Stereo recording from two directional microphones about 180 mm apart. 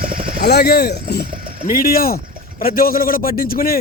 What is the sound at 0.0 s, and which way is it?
Vehicle, 55° right (ahead or behind).